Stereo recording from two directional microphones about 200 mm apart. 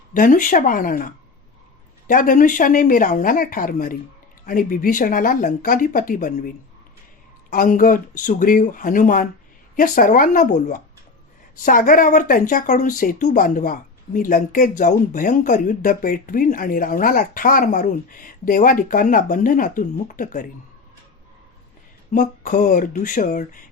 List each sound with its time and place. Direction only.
0.1 s speech: 40° left (ahead or behind)
7.5 s speech: 45° left (ahead or behind)
22.1 s speech: 40° left (ahead or behind)